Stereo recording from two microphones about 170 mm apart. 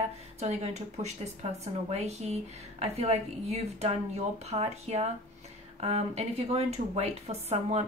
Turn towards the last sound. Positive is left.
turn(degrees=-40)  # may be behind; listen again after turning